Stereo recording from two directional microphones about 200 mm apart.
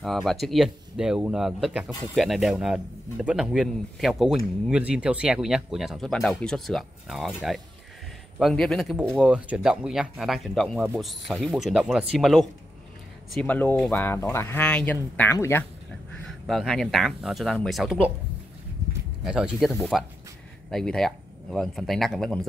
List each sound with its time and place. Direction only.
0.0 s speech: centre (ahead or behind)
16.3 s speech: centre (ahead or behind)
19.2 s speech: 5° right (ahead or behind)